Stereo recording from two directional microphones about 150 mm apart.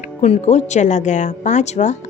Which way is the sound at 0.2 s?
50° left (ahead or behind).